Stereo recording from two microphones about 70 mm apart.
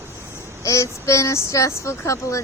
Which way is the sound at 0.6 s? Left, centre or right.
Left.